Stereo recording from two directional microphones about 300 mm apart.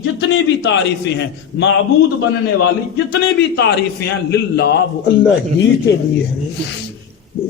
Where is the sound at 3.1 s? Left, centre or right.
Left.